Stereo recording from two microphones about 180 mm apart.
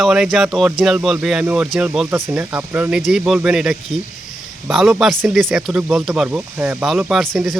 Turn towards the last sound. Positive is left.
turn(degrees=0)  # may be behind; listen again after turning